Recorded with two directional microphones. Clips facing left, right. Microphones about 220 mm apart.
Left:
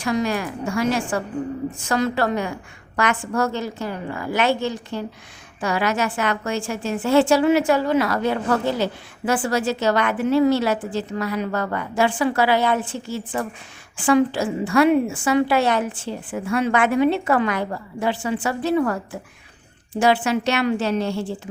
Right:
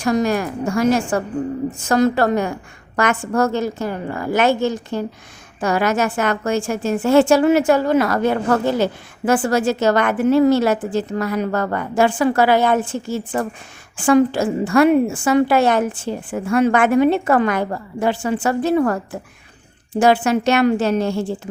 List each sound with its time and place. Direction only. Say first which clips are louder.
0.0 s a woman's voice: right 4 dB; 45° right (ahead or behind)